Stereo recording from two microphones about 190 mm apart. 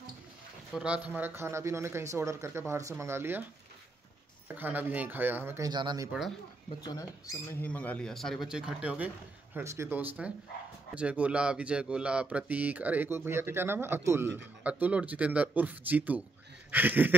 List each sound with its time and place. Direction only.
0.7 s speech: 5° right (ahead or behind)
4.5 s speech: 10° right (ahead or behind)
6.8 s speech: 15° left (ahead or behind); by 17.1 s 10° right (ahead or behind)